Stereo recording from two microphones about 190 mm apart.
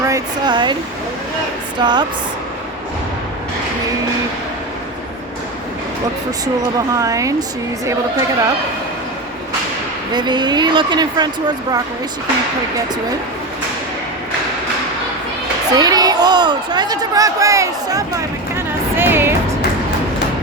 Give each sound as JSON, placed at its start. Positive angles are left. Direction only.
{"t": 0.0, "sound": "speech", "side_deg": -20}
{"t": 1.8, "sound": "speech", "side_deg": -20}
{"t": 6.4, "sound": "speech", "side_deg": -20}
{"t": 10.1, "sound": "speech", "side_deg": -20}
{"t": 15.7, "sound": "speech", "side_deg": -20}
{"t": 18.5, "sound": "music", "side_deg": -10}